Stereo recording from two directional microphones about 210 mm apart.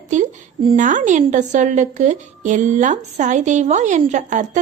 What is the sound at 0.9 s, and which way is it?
A woman's voice, 35° right (ahead or behind).